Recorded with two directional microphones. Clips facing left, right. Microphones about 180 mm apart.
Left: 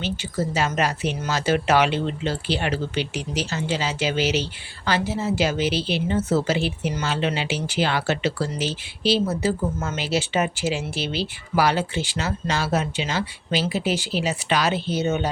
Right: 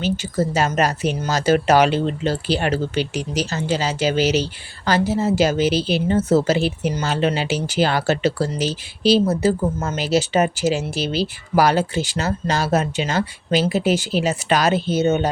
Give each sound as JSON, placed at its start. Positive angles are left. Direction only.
{"t": 0.0, "sound": "a woman's voice", "side_deg": -40}